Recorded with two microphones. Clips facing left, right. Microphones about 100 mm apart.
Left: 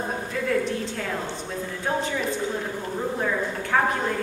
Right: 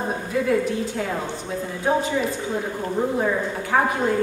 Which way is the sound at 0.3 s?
10° right (ahead or behind).